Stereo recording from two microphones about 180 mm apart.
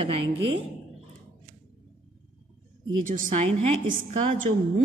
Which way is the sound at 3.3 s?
40° right (ahead or behind).